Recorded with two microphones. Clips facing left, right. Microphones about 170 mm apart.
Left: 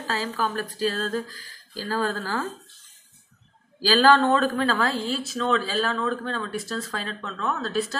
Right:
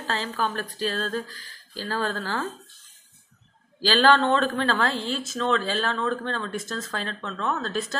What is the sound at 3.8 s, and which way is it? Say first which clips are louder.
A woman's voice: left 1 dB; 10° left (ahead or behind).